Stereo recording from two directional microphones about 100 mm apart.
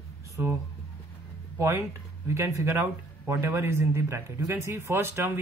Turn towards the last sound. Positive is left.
turn(degrees=-25)  # may be behind; listen again after turning